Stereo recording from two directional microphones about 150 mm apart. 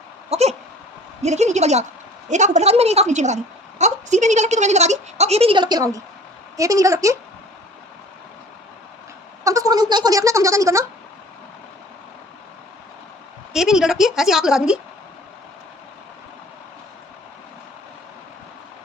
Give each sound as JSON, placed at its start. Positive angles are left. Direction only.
{"t": 0.3, "sound": "a sound", "side_deg": -45}
{"t": 1.2, "sound": "a woman's voice", "side_deg": -50}
{"t": 9.4, "sound": "speech", "side_deg": -20}
{"t": 13.5, "sound": "a woman's voice", "side_deg": -5}